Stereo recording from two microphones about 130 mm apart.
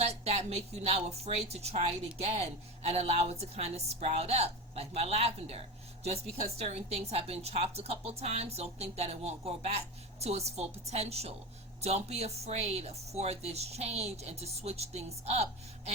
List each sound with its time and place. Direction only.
0.0 s a woman's voice: 55° right (ahead or behind)